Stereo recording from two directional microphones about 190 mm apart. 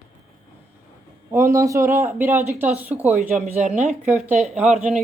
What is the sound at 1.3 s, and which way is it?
A man's voice, 15° right (ahead or behind).